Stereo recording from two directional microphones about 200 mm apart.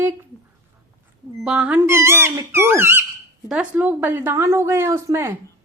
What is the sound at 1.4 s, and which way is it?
Speech, 5° right (ahead or behind).